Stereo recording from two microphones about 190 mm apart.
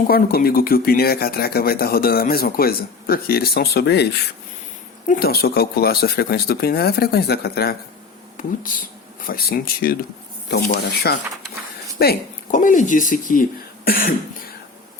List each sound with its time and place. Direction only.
0.1 s speech: 50° left (ahead or behind)
5.0 s speech: 50° left (ahead or behind)
8.4 s speech: 45° left (ahead or behind)